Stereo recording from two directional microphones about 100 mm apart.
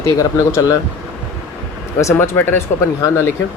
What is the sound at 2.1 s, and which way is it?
Speech, 20° left (ahead or behind).